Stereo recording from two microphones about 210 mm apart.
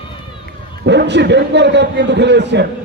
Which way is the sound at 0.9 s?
55° right (ahead or behind).